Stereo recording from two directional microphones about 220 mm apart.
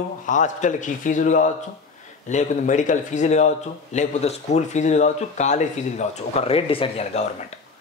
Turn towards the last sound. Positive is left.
turn(degrees=30)  # may be behind; listen again after turning